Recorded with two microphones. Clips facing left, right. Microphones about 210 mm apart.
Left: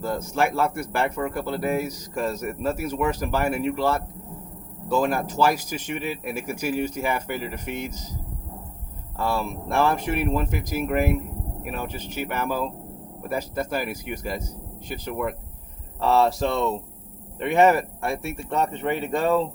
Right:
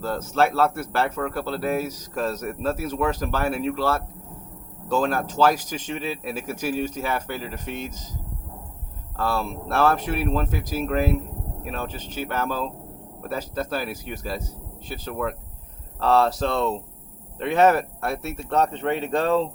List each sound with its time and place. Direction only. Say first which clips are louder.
0.0 s speech: right 2 dB; 15° left (ahead or behind)
9.1 s speech: even; 15° left (ahead or behind)